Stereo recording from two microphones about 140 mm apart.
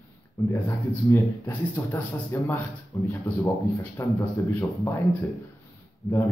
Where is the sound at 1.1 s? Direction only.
15° left (ahead or behind).